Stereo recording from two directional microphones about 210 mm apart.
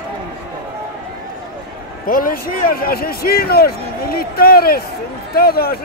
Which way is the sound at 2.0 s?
40° left (ahead or behind).